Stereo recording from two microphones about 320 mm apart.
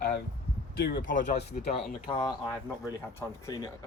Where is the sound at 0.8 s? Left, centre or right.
Left.